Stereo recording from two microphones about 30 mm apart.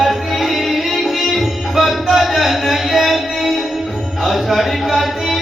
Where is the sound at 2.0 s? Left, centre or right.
Centre.